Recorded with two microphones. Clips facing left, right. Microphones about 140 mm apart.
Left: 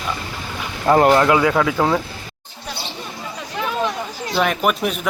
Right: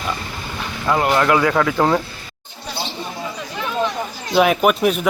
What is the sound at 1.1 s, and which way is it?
Speech, 15° left (ahead or behind).